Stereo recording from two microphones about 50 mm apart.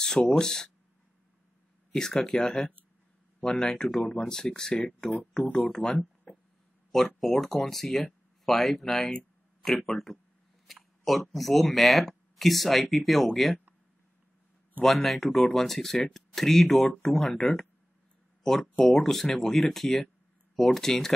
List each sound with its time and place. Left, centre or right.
0.0 s speech: centre
2.0 s speech: centre
14.8 s speech: centre